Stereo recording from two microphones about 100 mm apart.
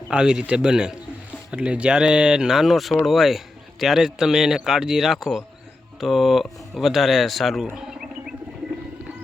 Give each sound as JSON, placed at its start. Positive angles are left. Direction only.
{"t": 0.1, "sound": "a man's voice", "side_deg": -10}